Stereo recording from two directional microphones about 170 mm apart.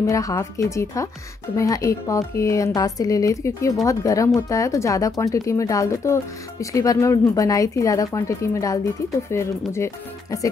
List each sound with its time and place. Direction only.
0.0 s speech: 20° left (ahead or behind)